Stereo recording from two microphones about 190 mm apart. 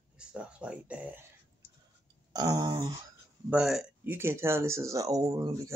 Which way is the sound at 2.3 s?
20° right (ahead or behind).